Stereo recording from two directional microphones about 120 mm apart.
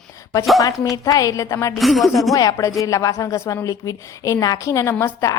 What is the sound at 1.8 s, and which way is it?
Speech, centre (ahead or behind).